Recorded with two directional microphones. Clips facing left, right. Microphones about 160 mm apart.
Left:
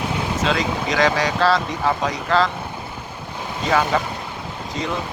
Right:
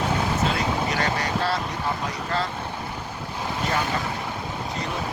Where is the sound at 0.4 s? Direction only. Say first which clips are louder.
Left 3 dB; 90° left.